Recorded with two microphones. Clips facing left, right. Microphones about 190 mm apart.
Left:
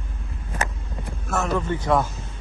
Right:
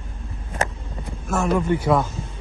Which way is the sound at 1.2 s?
10° right (ahead or behind).